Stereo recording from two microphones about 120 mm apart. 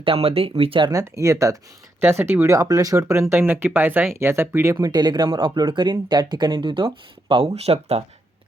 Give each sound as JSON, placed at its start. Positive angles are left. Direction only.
{"t": 0.0, "sound": "speech", "side_deg": -50}
{"t": 0.9, "sound": "speech", "side_deg": -25}
{"t": 7.4, "sound": "speech", "side_deg": -60}